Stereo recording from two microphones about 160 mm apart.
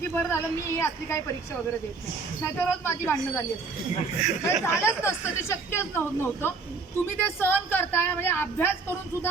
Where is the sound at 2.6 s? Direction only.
15° left (ahead or behind).